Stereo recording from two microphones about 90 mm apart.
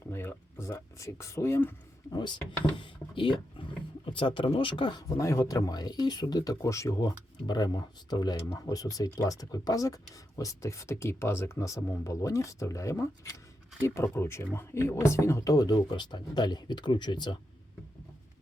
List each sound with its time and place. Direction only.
0.1 s a sound: 30° left (ahead or behind)
2.1 s speech: 55° left (ahead or behind)
2.7 s speech: 70° left (ahead or behind)
5.0 s speech: 40° left (ahead or behind)
7.4 s speech: 55° left (ahead or behind)